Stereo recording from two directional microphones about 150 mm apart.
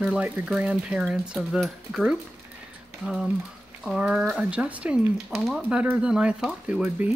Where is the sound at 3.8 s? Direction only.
5° right (ahead or behind).